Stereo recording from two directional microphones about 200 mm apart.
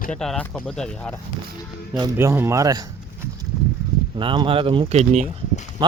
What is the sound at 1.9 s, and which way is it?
Speech, 15° right (ahead or behind).